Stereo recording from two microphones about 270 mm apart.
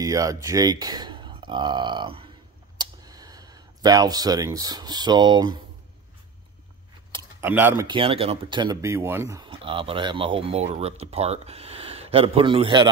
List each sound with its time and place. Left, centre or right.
0.0 s speech: centre
7.1 s speech: centre